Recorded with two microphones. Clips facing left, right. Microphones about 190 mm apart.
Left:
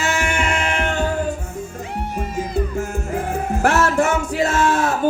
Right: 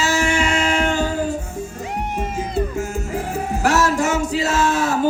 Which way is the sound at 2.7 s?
55° left (ahead or behind).